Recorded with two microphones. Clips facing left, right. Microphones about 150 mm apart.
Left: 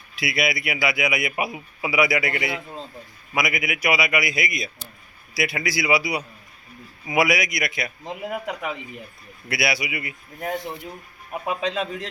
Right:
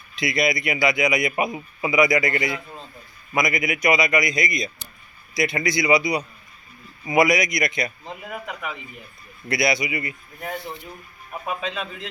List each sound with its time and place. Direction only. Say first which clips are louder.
0.2 s a man's voice: right 3 dB; 5° left (ahead or behind)
8.0 s a man's voice: left 4 dB; 15° left (ahead or behind)
9.5 s a man's voice: right 3 dB; 5° left (ahead or behind)
11.6 s a man's voice: left 4 dB; 40° left (ahead or behind)